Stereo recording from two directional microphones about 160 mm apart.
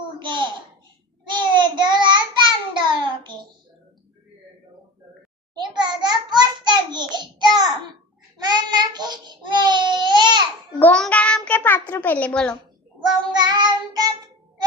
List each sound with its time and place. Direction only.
0.2 s a sound: 30° right (ahead or behind)
1.3 s child singing: 30° right (ahead or behind)
5.5 s a sound: 25° right (ahead or behind)
8.4 s child singing: 25° right (ahead or behind)
10.8 s child singing: 10° left (ahead or behind)
13.3 s child singing: 25° right (ahead or behind)